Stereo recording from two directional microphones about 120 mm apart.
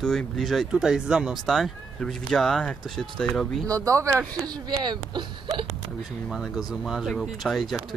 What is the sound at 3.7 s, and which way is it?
Speech, 30° right (ahead or behind).